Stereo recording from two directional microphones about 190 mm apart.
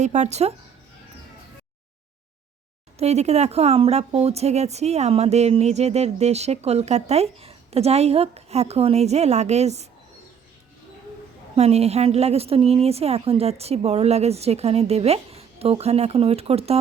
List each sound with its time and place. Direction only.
0.0 s a woman's voice: 40° right (ahead or behind)
3.0 s a woman's voice: 35° right (ahead or behind)
11.5 s a woman's voice: 35° right (ahead or behind)